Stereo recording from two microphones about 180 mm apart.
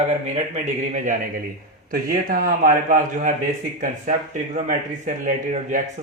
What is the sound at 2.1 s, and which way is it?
Speech, 50° right (ahead or behind).